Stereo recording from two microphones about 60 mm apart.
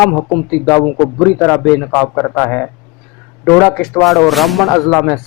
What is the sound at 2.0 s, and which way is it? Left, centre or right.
A man's voice, left.